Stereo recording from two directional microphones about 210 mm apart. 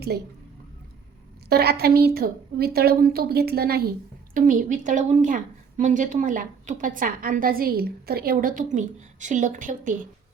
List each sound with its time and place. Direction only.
1.5 s a woman's voice: 50° right (ahead or behind)